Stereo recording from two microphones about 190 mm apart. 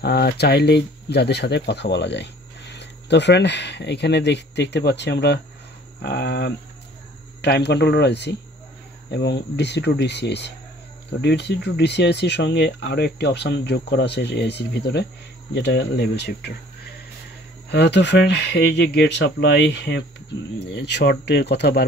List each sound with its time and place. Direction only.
0.0 s speech: 55° left (ahead or behind)